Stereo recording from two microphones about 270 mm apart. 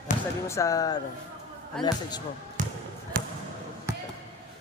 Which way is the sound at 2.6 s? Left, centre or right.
Right.